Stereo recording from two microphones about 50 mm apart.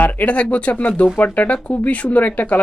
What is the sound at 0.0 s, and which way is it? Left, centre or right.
Speech, left.